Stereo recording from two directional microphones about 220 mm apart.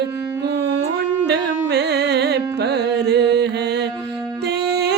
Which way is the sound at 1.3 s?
50° right (ahead or behind).